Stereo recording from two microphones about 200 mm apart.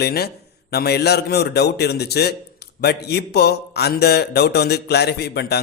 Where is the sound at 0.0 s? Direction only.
50° left (ahead or behind).